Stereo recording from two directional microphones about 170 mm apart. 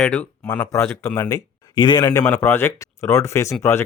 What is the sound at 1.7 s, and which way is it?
Speech, 25° left (ahead or behind).